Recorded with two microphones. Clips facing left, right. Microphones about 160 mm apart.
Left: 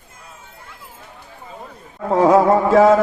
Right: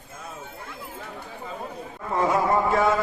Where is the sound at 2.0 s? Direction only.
90° left.